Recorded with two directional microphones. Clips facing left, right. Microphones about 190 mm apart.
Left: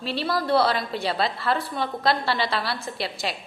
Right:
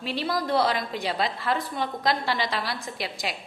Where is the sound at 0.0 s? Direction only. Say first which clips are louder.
Left 2 dB; 15° right (ahead or behind).